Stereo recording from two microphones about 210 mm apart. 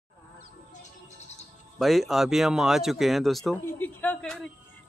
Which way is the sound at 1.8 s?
Centre (ahead or behind).